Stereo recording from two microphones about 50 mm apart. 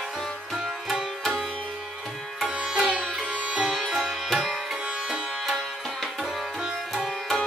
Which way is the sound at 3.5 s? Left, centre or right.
Centre.